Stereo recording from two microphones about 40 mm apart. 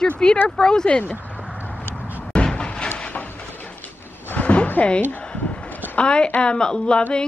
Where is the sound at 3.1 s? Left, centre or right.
Left.